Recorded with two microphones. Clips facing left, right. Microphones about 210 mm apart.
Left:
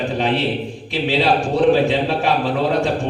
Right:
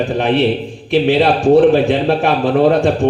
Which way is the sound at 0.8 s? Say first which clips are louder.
Right 6 dB; 55° right (ahead or behind).